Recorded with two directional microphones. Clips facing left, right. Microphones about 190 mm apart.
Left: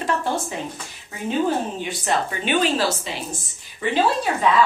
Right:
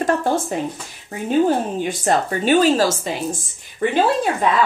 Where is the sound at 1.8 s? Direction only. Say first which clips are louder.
Right 5 dB; 45° right (ahead or behind).